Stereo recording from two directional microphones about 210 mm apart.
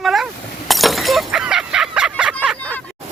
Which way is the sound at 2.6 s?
10° left (ahead or behind).